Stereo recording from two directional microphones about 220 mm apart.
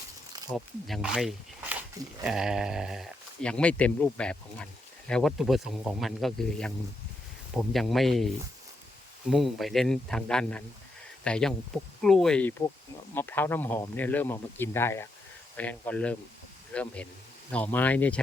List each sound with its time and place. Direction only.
0.4 s speech: centre (ahead or behind)
9.3 s speech: centre (ahead or behind)